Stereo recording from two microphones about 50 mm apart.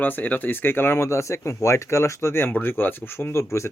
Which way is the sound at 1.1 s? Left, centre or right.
Left.